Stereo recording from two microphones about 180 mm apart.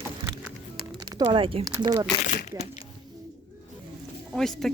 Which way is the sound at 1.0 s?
25° right (ahead or behind).